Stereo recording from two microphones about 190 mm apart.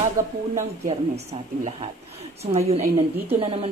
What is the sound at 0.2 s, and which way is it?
Speech, 15° right (ahead or behind).